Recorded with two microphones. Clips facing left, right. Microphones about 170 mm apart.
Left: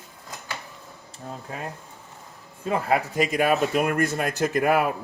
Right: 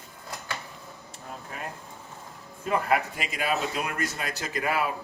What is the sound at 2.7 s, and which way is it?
Speech, 35° left (ahead or behind).